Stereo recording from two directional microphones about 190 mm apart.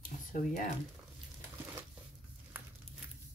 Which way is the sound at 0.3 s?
45° left (ahead or behind).